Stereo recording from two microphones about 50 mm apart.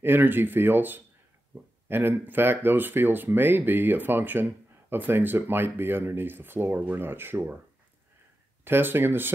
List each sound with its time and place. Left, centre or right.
0.0 s speech: right
8.6 s speech: right